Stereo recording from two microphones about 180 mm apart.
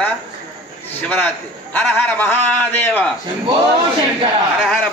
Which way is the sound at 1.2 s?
10° left (ahead or behind).